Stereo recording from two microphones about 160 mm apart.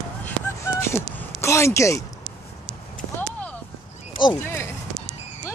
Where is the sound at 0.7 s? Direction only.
15° left (ahead or behind).